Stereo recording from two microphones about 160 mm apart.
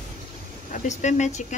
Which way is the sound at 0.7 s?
50° left (ahead or behind).